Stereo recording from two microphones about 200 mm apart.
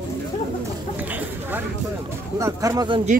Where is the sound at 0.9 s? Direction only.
10° right (ahead or behind).